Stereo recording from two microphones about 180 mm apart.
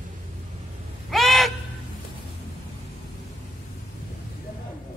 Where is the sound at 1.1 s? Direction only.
Centre (ahead or behind).